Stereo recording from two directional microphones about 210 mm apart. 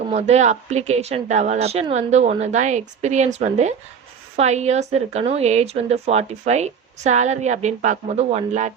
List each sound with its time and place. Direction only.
0.1 s a woman's voice: 30° right (ahead or behind)